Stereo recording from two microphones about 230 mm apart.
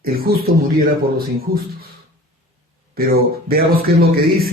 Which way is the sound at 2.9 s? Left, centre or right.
Right.